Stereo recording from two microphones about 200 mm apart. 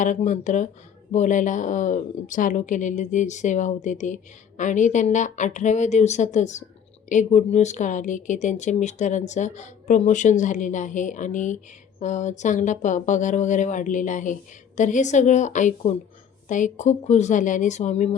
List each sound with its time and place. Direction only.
0.0 s speech: 40° left (ahead or behind)